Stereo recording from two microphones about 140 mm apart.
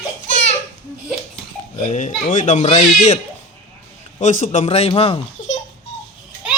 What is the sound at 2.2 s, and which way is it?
Speech, 60° left (ahead or behind).